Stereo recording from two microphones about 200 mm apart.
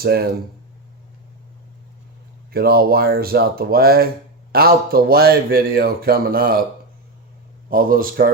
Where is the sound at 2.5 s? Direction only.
50° right (ahead or behind).